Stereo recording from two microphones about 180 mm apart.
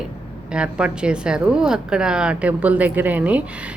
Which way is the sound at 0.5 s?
5° right (ahead or behind).